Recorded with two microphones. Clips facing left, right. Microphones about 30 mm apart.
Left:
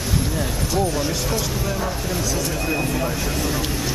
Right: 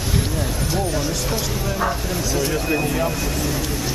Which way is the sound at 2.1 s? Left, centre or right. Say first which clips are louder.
Right 2 dB; centre.